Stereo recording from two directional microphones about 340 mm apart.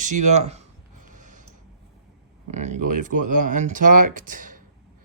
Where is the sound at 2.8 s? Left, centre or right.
Right.